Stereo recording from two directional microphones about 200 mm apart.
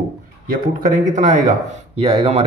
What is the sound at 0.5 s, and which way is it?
Speech, 45° right (ahead or behind).